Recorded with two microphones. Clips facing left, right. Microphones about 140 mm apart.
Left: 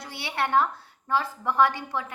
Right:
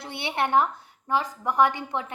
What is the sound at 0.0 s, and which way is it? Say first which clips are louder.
A woman's voice: right 2 dB; 25° right (ahead or behind).